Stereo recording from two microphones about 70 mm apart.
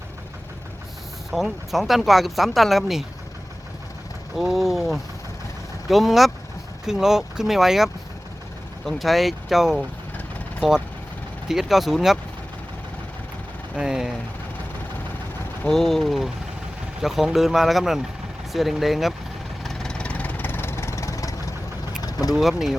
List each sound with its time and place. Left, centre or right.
1.3 s speech: centre
4.4 s mechanisms: centre
5.9 s speech: centre
13.7 s speech: centre
15.6 s speech: centre
19.6 s vehicle: centre; by 22.4 s left
22.4 s speech: centre